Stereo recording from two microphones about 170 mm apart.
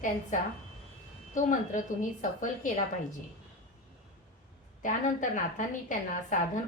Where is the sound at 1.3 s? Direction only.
50° left (ahead or behind).